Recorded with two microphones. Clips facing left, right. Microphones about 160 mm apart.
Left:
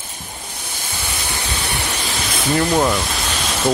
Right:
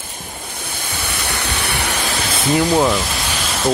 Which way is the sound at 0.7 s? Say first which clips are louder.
Right 2 dB; 60° right (ahead or behind).